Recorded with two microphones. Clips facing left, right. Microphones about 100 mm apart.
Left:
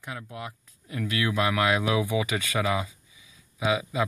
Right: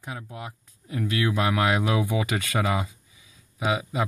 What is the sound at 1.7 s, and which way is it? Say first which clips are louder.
Speech: even; 40° right (ahead or behind).